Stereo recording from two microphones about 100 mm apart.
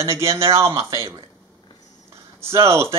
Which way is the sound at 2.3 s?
25° right (ahead or behind).